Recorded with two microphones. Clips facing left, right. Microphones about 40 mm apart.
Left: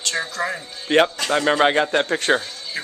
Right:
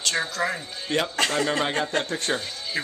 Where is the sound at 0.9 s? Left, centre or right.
Left.